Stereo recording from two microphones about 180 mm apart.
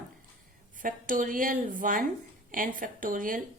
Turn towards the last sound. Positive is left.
turn(degrees=-50)  # may be behind; listen again after turning